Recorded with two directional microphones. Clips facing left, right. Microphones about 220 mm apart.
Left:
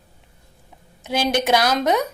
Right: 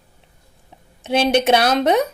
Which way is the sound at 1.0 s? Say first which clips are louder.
Right 4 dB; 25° right (ahead or behind).